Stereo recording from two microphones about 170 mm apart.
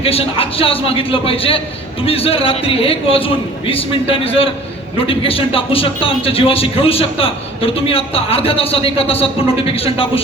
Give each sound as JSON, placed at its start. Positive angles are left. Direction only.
{"t": 0.0, "sound": "a man's voice", "side_deg": 35}